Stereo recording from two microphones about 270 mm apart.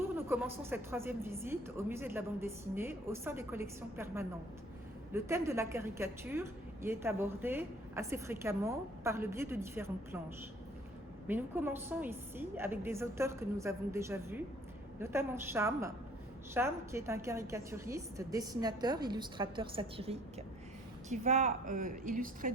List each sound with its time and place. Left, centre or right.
0.2 s a woman's voice: centre
11.3 s a woman's voice: centre; by 22.5 s right